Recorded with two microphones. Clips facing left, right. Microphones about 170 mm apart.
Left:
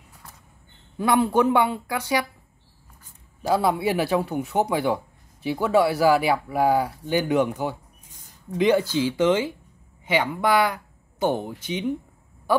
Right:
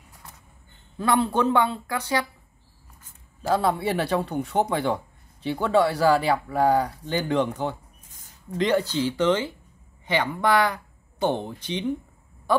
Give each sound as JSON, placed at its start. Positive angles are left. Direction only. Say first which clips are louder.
{"t": 0.9, "sound": "speech", "louder": "left 2 dB", "side_deg": 10}
{"t": 3.4, "sound": "speech", "louder": "left 1 dB", "side_deg": 10}